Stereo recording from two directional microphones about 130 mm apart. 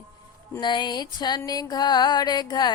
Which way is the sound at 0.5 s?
35° left (ahead or behind).